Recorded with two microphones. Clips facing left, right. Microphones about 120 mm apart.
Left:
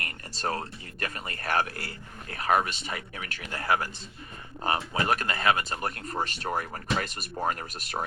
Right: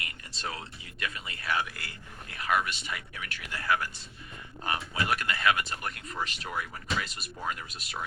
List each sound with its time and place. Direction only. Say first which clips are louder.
0.0 s speech: left 6 dB; 45° left (ahead or behind)